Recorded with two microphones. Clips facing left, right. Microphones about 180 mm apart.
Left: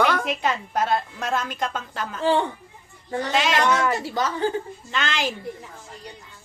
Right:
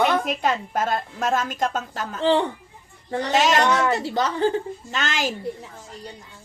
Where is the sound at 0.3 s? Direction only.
50° right (ahead or behind).